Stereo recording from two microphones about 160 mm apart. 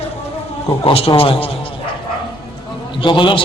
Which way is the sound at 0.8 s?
35° left (ahead or behind).